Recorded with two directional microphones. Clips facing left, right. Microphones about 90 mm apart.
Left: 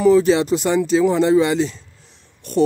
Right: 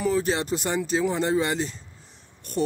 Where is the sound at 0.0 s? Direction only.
90° left.